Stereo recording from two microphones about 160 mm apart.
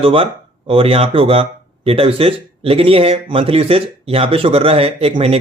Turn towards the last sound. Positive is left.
turn(degrees=-35)  # may be behind; listen again after turning